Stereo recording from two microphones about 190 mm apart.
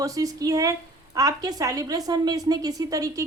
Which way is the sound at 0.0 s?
20° right (ahead or behind).